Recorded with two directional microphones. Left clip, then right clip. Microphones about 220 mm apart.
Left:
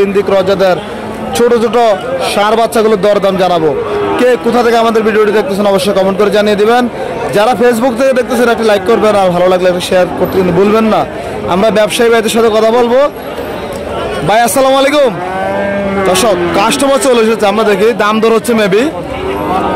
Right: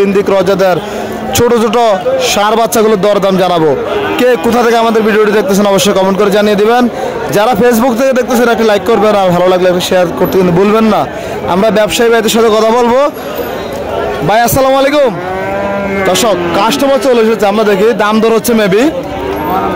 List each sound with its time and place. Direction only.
0.0 s a man's voice: 15° right (ahead or behind)
14.2 s a man's voice: 10° right (ahead or behind)
16.8 s a man's voice: centre (ahead or behind); by 18.9 s 15° right (ahead or behind)